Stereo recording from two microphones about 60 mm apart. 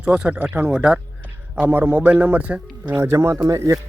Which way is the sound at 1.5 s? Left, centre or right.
Right.